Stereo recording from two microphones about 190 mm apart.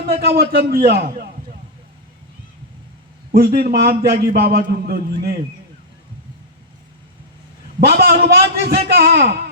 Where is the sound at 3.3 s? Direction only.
55° right (ahead or behind).